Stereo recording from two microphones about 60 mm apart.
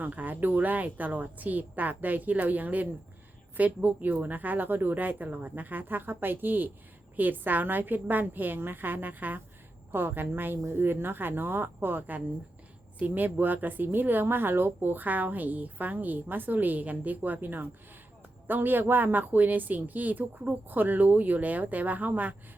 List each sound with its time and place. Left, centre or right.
0.0 s speech: right